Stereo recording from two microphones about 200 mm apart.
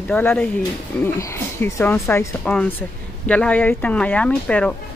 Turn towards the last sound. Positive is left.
turn(degrees=5)  # may be behind; listen again after turning